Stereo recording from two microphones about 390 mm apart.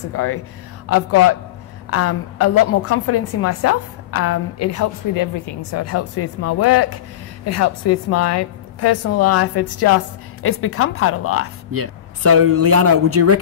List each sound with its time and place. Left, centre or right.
0.1 s a woman's voice: left
11.7 s speech: right